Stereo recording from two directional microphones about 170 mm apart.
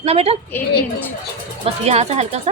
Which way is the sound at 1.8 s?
40° right (ahead or behind).